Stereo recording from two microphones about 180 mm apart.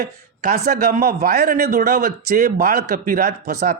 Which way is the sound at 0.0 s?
60° right (ahead or behind).